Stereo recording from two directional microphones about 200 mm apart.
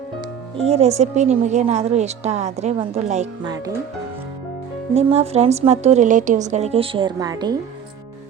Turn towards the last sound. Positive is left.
turn(degrees=-20)  # may be behind; listen again after turning